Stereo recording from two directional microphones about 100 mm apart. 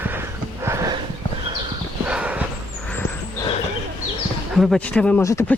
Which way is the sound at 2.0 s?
10° right (ahead or behind).